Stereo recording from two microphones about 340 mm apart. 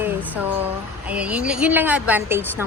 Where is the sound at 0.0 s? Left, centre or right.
Centre.